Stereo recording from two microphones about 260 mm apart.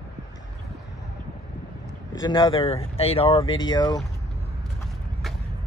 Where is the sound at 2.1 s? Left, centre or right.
Centre.